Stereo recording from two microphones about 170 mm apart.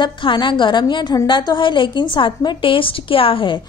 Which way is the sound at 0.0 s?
30° left (ahead or behind).